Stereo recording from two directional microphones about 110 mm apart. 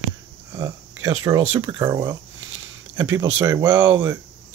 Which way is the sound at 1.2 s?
40° right (ahead or behind).